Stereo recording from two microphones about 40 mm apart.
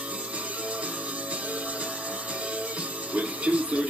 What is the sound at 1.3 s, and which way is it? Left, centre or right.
Music, right.